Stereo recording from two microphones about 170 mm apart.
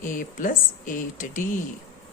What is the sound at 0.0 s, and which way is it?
Speech, 50° left (ahead or behind).